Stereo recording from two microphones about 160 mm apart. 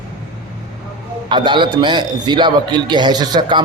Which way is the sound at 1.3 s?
30° right (ahead or behind).